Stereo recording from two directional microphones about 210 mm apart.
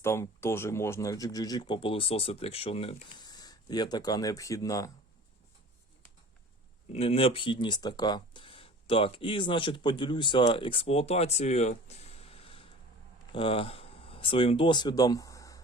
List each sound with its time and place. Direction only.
0.0 s speech: 10° left (ahead or behind)
6.9 s speech: 30° left (ahead or behind)